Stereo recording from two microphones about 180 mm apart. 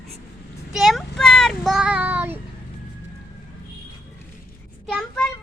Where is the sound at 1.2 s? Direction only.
5° left (ahead or behind).